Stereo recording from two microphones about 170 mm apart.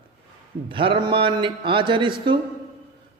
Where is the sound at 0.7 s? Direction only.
30° right (ahead or behind).